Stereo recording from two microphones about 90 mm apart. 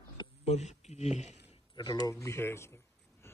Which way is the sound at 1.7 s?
50° left (ahead or behind).